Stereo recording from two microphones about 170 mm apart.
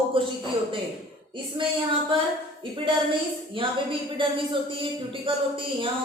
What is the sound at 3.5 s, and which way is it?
Speech, 30° right (ahead or behind).